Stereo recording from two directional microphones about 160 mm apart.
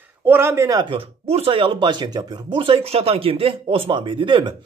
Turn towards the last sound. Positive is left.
turn(degrees=-30)  # may be behind; listen again after turning